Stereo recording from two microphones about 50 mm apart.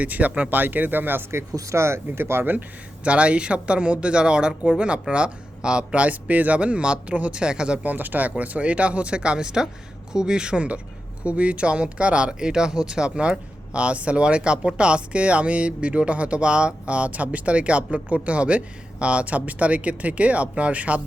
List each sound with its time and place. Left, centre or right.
0.0 s speech: right
1.3 s speech: right
2.4 s speech: right
3.0 s speech: right
7.9 s speech: right